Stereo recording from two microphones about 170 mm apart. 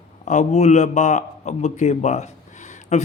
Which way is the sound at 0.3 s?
40° left (ahead or behind).